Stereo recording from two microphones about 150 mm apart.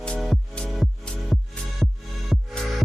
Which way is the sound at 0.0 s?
5° left (ahead or behind).